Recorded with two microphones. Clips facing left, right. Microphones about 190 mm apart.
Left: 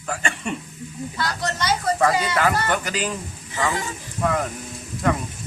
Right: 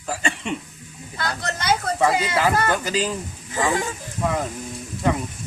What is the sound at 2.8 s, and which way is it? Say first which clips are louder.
Speech: right 3 dB; 30° right (ahead or behind).